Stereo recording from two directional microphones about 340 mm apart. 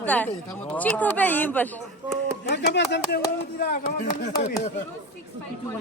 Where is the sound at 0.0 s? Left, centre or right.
Centre.